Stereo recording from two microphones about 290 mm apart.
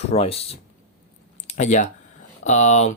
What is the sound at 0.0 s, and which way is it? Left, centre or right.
Speech, left.